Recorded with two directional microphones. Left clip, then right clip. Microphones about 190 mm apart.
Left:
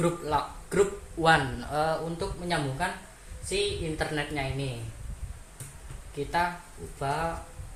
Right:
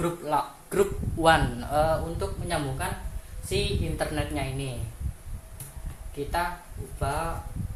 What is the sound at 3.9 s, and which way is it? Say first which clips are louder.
Speech: right 1 dB; 30° right (ahead or behind).